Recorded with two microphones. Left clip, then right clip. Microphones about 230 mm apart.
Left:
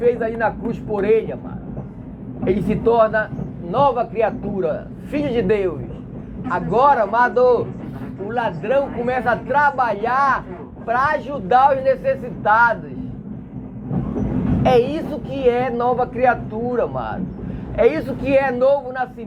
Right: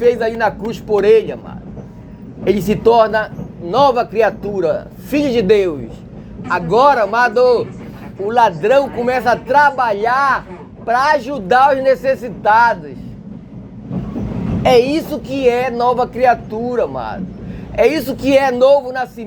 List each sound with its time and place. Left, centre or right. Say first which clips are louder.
0.0 s speech: right 4 dB; right
2.4 s speech: right 5 dB; right
8.3 s speech: right 9 dB; right
14.6 s speech: right 5 dB; right